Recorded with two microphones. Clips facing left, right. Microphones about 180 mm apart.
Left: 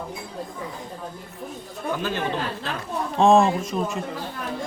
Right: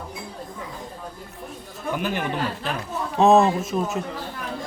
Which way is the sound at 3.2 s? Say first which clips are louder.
Right 1 dB; 5° right (ahead or behind).